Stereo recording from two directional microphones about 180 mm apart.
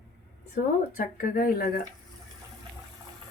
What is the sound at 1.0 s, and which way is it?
Speech, 50° left (ahead or behind).